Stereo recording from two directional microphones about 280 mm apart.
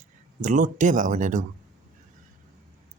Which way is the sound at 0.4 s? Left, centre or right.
Right.